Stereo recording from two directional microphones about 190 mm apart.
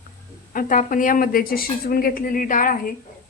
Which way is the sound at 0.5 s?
45° left (ahead or behind).